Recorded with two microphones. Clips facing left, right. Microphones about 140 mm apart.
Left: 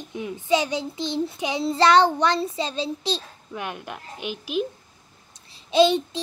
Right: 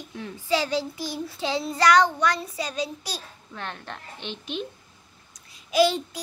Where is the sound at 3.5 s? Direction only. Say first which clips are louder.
Left 4 dB; 10° left (ahead or behind).